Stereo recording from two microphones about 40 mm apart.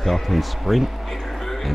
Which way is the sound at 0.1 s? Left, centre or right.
Centre.